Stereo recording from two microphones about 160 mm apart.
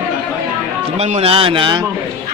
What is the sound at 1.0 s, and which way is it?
Speech, 40° right (ahead or behind).